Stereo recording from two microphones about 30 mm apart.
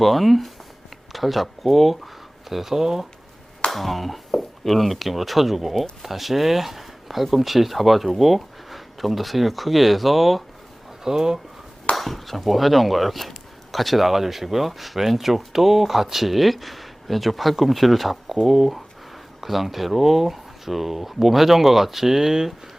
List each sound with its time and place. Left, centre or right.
0.0 s speech: centre
3.7 s speech: centre
11.0 s speech: centre
11.9 s speech: centre